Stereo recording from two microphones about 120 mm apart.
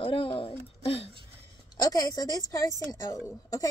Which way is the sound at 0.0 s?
45° left (ahead or behind).